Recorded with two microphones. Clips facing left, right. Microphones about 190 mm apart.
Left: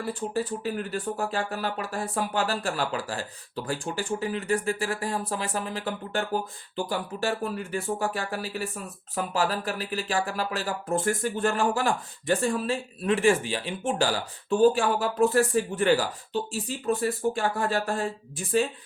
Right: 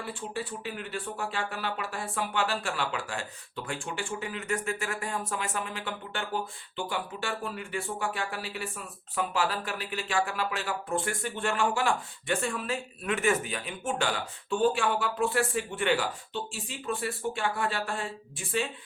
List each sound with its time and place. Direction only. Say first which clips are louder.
0.0 s speech: left 7 dB; 40° left (ahead or behind)